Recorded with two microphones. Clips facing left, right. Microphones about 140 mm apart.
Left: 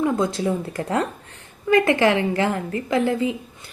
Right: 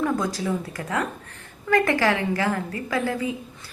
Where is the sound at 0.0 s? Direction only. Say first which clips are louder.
Left 3 dB; 25° left (ahead or behind).